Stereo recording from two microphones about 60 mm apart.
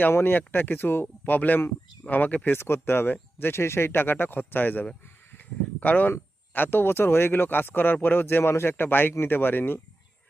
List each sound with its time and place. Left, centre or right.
0.1 s speech: left